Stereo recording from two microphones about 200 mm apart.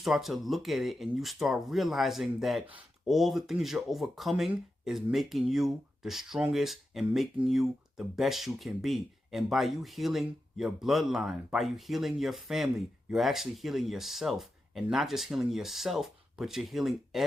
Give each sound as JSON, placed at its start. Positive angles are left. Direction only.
{"t": 0.0, "sound": "speech", "side_deg": 0}